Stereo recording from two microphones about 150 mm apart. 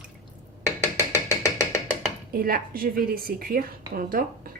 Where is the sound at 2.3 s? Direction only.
80° right.